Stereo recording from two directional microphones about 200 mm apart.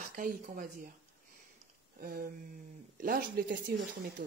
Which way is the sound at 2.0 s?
45° right (ahead or behind).